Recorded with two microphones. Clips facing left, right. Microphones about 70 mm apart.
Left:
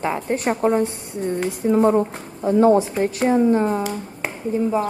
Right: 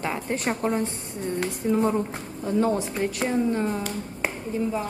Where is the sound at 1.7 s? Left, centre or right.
Left.